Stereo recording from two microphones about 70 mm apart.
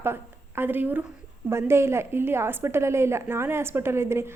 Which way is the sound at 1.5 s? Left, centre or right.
Right.